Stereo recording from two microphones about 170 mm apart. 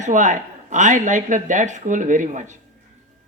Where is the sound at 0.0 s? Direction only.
50° right (ahead or behind).